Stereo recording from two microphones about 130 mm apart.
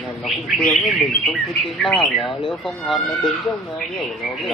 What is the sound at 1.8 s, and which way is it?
Speech, 5° left (ahead or behind).